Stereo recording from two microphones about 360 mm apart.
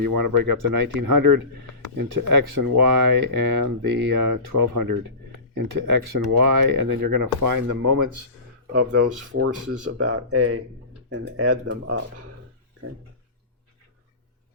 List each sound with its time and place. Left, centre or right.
0.0 s speech: right
8.7 s speech: right
9.4 s speech: right
10.0 s speech: right